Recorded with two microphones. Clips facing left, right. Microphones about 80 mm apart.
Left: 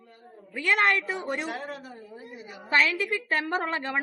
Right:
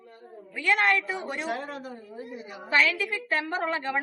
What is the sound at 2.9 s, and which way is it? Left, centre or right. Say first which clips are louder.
Speech: left 1 dB; left.